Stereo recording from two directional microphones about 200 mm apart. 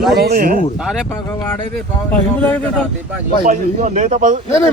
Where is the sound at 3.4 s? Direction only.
35° right (ahead or behind).